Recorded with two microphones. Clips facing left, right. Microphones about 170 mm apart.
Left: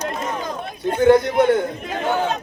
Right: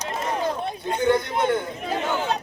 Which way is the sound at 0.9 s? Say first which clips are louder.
Left 7 dB; 55° left (ahead or behind).